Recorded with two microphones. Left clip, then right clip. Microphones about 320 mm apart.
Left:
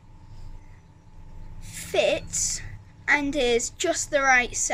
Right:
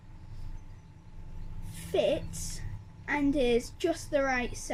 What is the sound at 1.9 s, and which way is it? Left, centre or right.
A woman's voice, left.